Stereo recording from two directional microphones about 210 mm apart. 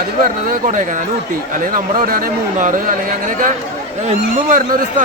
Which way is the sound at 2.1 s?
40° right (ahead or behind).